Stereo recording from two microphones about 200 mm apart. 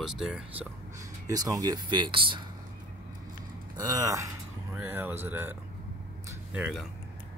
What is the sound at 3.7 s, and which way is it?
Speech, 15° right (ahead or behind).